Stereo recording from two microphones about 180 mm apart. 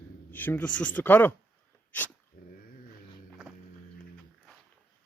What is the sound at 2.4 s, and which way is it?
Dog, 55° left (ahead or behind).